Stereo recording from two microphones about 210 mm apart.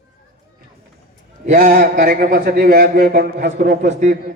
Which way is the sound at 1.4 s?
35° right (ahead or behind).